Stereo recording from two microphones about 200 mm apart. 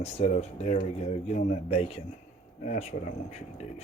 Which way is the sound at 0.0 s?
35° left (ahead or behind).